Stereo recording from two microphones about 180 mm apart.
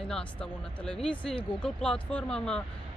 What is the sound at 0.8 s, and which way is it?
Speech, 5° left (ahead or behind).